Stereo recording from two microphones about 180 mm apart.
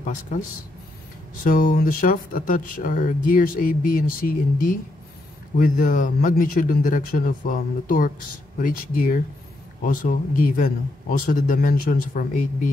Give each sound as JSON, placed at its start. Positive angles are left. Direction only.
{"t": 0.0, "sound": "speech", "side_deg": 45}